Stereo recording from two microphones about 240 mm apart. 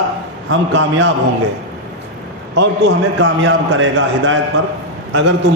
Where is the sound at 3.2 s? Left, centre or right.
Right.